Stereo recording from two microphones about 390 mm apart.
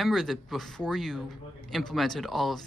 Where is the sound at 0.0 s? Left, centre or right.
Centre.